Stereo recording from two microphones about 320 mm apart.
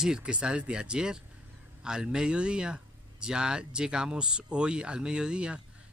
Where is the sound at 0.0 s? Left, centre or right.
Centre.